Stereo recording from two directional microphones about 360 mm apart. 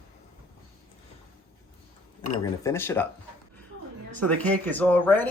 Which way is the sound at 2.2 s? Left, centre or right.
Centre.